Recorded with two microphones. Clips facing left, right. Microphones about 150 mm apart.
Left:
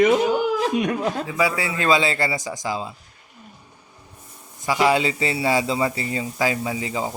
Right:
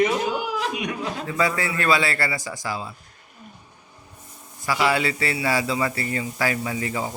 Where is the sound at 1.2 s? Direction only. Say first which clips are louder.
Left 1 dB; 10° left (ahead or behind).